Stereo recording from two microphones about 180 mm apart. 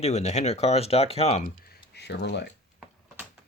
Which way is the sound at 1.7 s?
65° left (ahead or behind).